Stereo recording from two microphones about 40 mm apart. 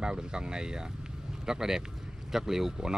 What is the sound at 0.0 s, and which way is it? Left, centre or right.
Speech, right.